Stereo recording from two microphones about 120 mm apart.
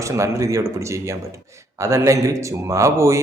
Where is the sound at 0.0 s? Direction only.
25° right (ahead or behind).